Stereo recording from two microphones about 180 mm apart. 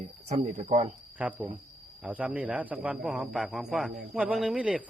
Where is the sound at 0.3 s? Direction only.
30° right (ahead or behind).